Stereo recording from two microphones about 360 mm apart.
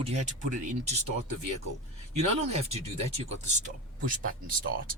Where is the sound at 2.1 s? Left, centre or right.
Centre.